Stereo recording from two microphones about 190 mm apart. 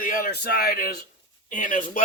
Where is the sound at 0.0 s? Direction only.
50° left (ahead or behind).